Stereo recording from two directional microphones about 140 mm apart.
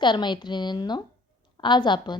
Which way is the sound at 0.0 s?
35° left (ahead or behind).